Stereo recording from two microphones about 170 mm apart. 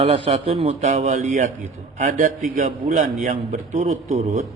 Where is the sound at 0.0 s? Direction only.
35° right (ahead or behind).